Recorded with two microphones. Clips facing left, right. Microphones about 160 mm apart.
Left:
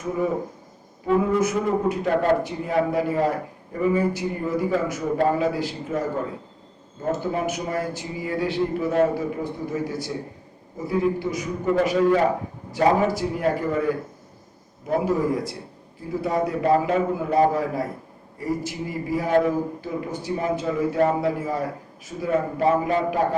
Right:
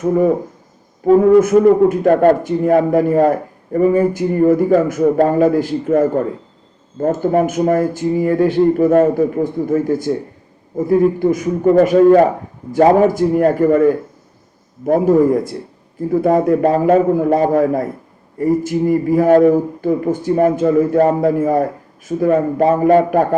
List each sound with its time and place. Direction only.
1.0 s a man's voice: 45° right (ahead or behind)